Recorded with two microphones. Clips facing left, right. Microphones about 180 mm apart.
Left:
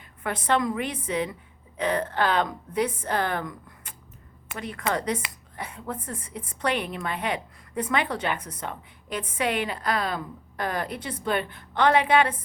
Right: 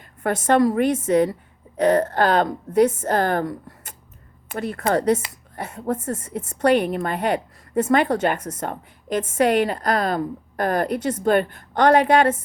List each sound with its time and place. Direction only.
0.2 s speech: 45° right (ahead or behind)